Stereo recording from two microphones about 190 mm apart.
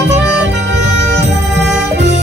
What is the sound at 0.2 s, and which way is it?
Music, 65° right (ahead or behind).